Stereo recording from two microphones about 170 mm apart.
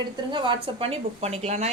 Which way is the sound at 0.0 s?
30° right (ahead or behind).